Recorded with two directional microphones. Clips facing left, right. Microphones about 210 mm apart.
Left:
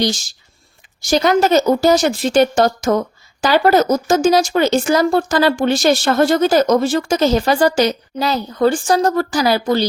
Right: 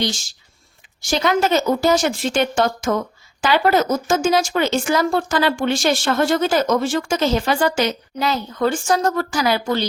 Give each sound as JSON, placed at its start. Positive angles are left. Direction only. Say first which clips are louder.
{"t": 1.0, "sound": "speech", "louder": "left 4 dB", "side_deg": 40}